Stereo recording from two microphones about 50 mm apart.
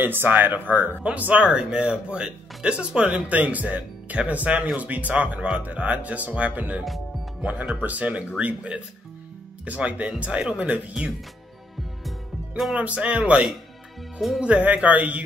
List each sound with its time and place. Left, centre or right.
0.0 s speech: right
7.8 s speech: right
12.7 s speech: right
14.6 s speech: right